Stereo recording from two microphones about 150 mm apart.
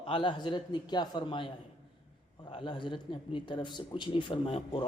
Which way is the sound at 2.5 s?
35° left (ahead or behind).